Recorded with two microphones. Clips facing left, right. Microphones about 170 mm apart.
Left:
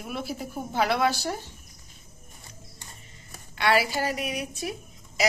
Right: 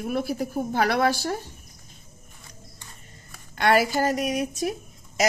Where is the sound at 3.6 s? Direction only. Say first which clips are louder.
Right 3 dB; 45° right (ahead or behind).